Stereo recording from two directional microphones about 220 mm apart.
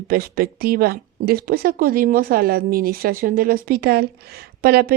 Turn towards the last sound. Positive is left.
turn(degrees=-45)  # may be behind; listen again after turning